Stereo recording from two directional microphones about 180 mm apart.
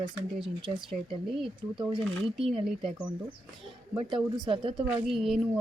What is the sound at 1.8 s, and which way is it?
Speech, 25° right (ahead or behind).